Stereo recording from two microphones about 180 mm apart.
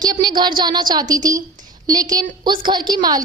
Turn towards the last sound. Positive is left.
turn(degrees=-20)  # may be behind; listen again after turning